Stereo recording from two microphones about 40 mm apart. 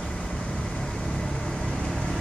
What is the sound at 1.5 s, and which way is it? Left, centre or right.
Vehicle, centre.